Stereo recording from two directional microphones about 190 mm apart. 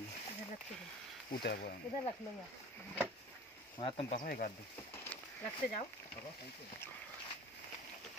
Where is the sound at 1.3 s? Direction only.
55° left (ahead or behind).